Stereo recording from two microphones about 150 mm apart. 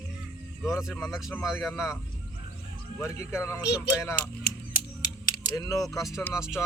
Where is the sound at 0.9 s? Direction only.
10° left (ahead or behind).